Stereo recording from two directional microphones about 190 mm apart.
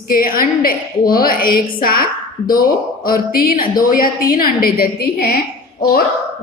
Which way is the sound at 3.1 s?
50° left (ahead or behind).